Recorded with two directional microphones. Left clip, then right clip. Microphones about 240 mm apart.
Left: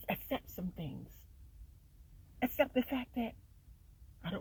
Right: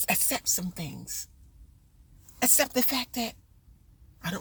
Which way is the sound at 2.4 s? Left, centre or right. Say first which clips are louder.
Right 6 dB; right.